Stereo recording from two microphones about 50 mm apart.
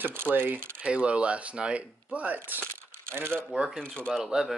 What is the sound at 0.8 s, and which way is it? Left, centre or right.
Speech, right.